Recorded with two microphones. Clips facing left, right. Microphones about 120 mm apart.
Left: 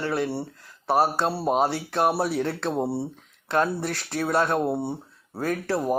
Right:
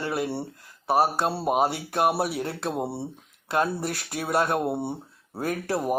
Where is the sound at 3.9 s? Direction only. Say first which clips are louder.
Left 2 dB; 15° right (ahead or behind).